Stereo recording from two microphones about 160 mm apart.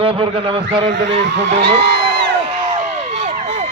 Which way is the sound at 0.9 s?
90° right.